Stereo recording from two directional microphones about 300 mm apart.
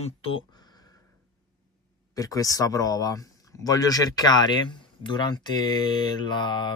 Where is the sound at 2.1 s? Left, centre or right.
Centre.